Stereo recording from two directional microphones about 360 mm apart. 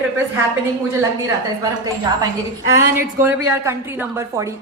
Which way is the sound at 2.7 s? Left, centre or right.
Centre.